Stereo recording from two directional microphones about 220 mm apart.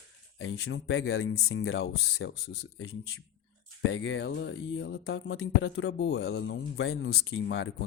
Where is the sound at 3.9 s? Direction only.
55° left (ahead or behind).